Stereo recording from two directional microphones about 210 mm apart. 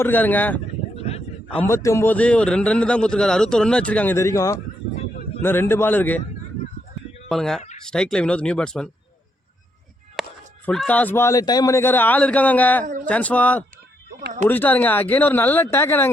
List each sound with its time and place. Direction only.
0.0 s a man's voice: 10° left (ahead or behind)
0.9 s a sound: 30° left (ahead or behind)
1.6 s a man's voice: 15° left (ahead or behind)
7.3 s a man's voice: centre (ahead or behind)
10.2 s a sound: centre (ahead or behind)
10.7 s a man's voice: 5° left (ahead or behind)
12.8 s speech: 40° right (ahead or behind)
13.1 s a man's voice: 5° left (ahead or behind)
14.2 s speech: 40° right (ahead or behind)
14.4 s a man's voice: 10° left (ahead or behind)